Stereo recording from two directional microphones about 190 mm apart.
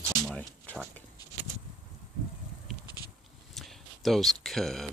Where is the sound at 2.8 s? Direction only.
20° left (ahead or behind).